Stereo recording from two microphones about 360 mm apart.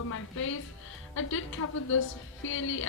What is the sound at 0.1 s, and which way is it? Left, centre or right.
Speech, left.